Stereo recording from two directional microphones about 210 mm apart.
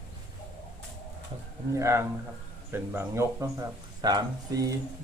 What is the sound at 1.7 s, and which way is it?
Speech, 15° right (ahead or behind).